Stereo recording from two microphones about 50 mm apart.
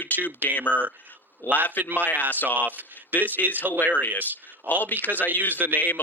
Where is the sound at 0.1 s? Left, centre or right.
Left.